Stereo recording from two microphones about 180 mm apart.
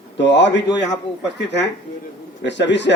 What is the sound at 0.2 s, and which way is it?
A man's voice, 80° left.